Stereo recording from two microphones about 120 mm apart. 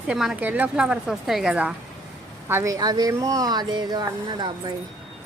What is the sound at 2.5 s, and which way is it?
Speech, 25° right (ahead or behind).